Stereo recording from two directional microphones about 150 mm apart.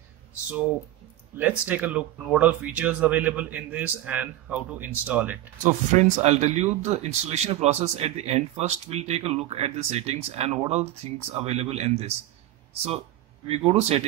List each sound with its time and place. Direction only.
1.3 s speech: 10° right (ahead or behind)
5.6 s speech: 50° right (ahead or behind)
13.5 s speech: 45° right (ahead or behind)